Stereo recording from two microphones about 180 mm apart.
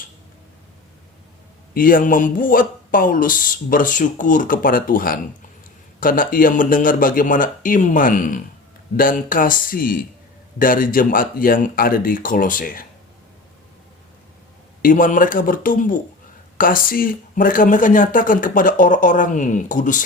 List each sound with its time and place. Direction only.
1.7 s speech: 50° left (ahead or behind)
14.8 s speech: 50° left (ahead or behind)